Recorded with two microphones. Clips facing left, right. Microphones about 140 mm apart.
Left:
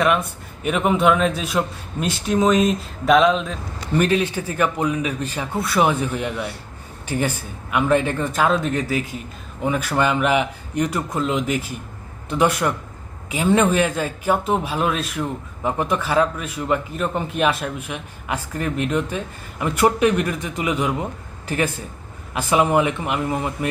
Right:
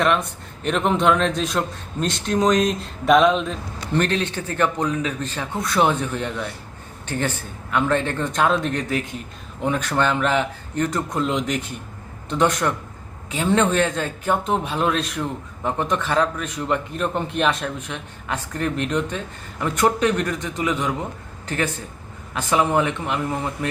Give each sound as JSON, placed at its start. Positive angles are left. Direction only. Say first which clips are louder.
{"t": 0.0, "sound": "a man's voice", "louder": "left 1 dB", "side_deg": 5}
{"t": 11.1, "sound": "a man's voice", "louder": "left 1 dB", "side_deg": 0}